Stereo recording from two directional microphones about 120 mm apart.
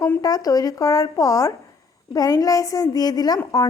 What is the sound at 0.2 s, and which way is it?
A woman's voice, 30° left (ahead or behind).